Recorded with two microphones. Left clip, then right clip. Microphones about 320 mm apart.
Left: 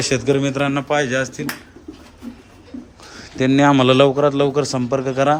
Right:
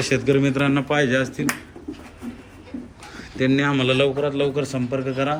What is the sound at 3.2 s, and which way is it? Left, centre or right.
A man's voice, centre.